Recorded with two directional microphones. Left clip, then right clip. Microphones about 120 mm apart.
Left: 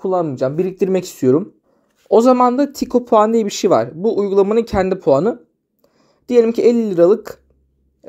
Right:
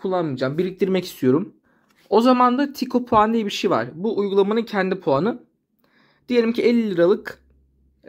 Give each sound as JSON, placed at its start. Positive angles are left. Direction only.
{"t": 0.0, "sound": "speech", "side_deg": 30}